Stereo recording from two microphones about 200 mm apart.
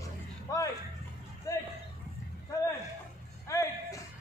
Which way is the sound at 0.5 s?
15° left (ahead or behind).